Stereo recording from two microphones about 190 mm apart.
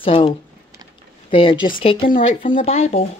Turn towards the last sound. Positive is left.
turn(degrees=35)  # may be behind; listen again after turning